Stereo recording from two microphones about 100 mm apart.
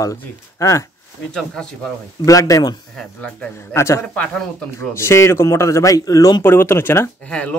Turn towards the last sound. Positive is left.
turn(degrees=10)  # may be behind; listen again after turning